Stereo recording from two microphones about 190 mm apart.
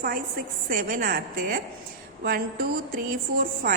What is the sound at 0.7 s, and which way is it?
Speech, 50° right (ahead or behind).